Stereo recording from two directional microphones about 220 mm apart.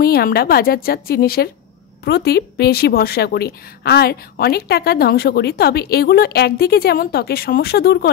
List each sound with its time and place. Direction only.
0.0 s a woman's voice: 45° left (ahead or behind)